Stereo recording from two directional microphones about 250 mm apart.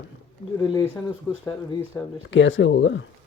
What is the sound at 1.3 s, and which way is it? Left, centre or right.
Speech, centre.